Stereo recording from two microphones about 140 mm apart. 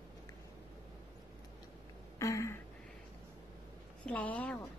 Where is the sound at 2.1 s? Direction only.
20° left (ahead or behind).